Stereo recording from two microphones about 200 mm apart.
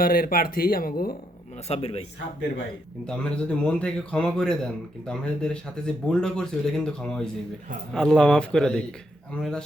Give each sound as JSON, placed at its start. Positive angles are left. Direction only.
{"t": 0.0, "sound": "speech", "side_deg": 45}
{"t": 1.6, "sound": "a man's voice", "side_deg": 30}
{"t": 3.1, "sound": "a man's voice", "side_deg": 5}